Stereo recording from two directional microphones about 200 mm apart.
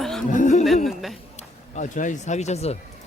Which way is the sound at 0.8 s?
Centre (ahead or behind).